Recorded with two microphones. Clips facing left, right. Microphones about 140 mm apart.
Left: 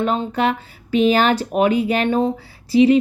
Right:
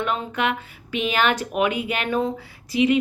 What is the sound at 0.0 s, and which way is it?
Speech, 35° left (ahead or behind).